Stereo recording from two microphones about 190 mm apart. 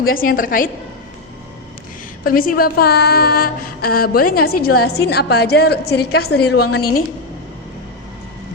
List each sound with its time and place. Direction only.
0.0 s a woman's voice: 50° left (ahead or behind)
2.2 s speech: 50° left (ahead or behind)